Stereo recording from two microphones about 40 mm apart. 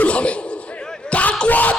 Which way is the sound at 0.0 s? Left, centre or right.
Left.